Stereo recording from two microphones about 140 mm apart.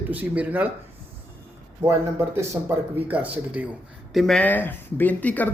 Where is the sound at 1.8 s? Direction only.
20° right (ahead or behind).